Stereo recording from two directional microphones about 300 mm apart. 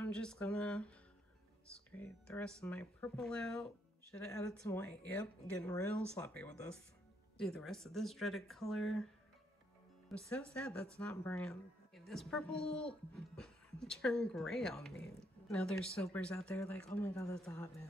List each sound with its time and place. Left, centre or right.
0.0 s speech: centre